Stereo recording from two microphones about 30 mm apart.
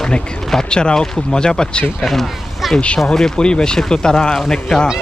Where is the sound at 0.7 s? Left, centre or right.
Left.